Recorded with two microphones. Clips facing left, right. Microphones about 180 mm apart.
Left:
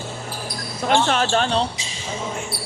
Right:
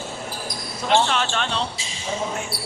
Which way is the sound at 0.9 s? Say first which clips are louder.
Left 2 dB; 45° left (ahead or behind).